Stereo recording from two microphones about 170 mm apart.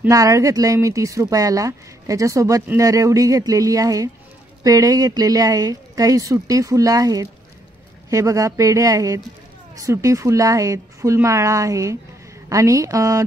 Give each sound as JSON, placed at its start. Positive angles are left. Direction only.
{"t": 0.0, "sound": "a woman's voice", "side_deg": -20}